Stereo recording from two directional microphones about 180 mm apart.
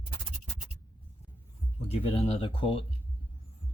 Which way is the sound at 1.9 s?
30° left (ahead or behind).